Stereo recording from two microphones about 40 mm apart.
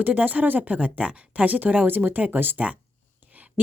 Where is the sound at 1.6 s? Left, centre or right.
Right.